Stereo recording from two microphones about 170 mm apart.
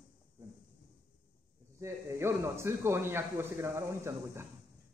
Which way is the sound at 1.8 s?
15° right (ahead or behind).